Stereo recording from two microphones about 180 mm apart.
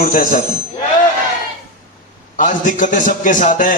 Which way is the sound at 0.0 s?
45° left (ahead or behind).